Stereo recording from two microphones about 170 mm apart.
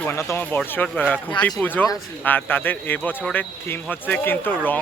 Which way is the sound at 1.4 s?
30° left (ahead or behind).